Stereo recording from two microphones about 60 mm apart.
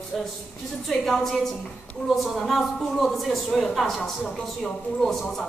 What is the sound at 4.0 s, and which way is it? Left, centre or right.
Speech, centre.